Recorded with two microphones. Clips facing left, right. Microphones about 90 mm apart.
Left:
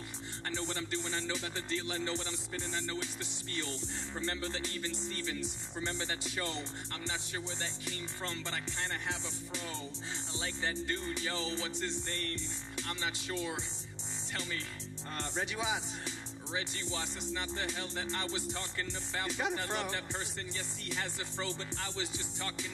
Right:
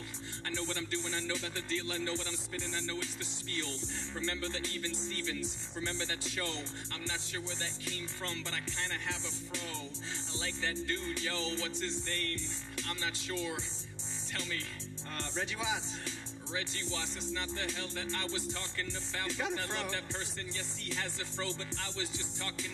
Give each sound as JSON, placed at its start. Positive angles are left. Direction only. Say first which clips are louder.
{"t": 0.5, "sound": "speech", "louder": "even", "side_deg": 20}
{"t": 4.2, "sound": "speech", "louder": "even", "side_deg": 20}
{"t": 10.3, "sound": "speech", "louder": "even", "side_deg": 20}
{"t": 15.1, "sound": "speech", "louder": "left 1 dB", "side_deg": 20}